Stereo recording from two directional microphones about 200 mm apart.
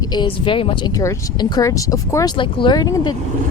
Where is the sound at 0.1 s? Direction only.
25° left (ahead or behind).